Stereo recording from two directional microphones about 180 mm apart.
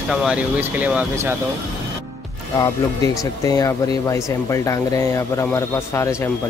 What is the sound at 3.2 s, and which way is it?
Speech, 20° left (ahead or behind).